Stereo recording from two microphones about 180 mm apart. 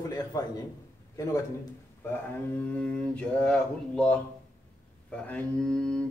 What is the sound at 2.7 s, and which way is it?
Mantra, 5° left (ahead or behind).